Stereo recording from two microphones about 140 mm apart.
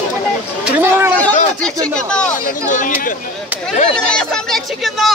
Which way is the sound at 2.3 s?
70° left (ahead or behind).